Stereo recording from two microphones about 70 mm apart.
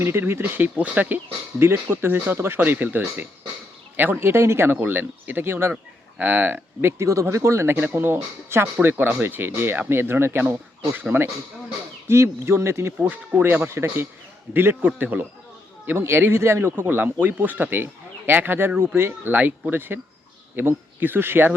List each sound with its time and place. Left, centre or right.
0.0 s speech: right
1.5 s speech: right
7.0 s speech: right
7.9 s speech: right
12.0 s speech: right
16.8 s speech: right
19.3 s speech: right